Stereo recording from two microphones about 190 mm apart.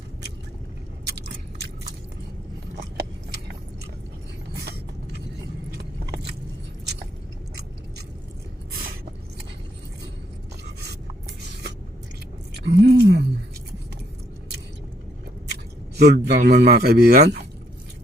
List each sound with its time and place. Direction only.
5.7 s car: 65° right (ahead or behind)
12.5 s a sound: 60° right (ahead or behind)
16.0 s speech: 60° right (ahead or behind)